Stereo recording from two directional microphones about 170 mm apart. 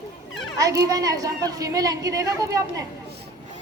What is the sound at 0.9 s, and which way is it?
A woman's voice, 20° right (ahead or behind).